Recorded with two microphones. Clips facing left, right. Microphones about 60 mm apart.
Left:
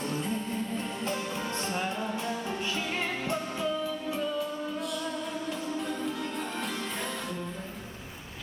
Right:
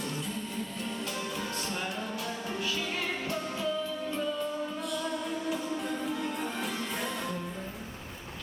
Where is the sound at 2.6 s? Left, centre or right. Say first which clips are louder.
Even; left; by 7.5 s centre.